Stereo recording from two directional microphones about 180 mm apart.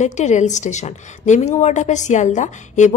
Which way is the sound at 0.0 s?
40° left (ahead or behind).